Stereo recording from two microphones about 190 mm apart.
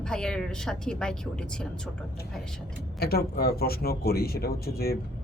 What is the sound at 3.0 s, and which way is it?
A man's voice, 55° left (ahead or behind).